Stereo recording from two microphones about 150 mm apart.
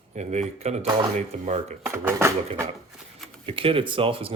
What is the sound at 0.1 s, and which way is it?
Speech, 50° right (ahead or behind).